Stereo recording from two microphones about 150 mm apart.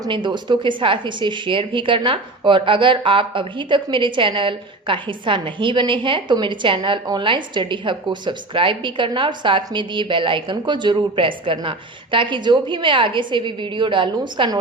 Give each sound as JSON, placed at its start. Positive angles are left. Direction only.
{"t": 0.0, "sound": "a woman's voice", "side_deg": -30}